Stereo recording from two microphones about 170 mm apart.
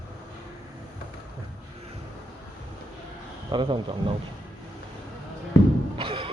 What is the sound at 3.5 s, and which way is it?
Speech, 30° right (ahead or behind).